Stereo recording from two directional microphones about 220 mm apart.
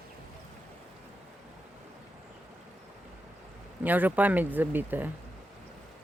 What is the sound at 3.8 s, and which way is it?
Speech, 10° right (ahead or behind).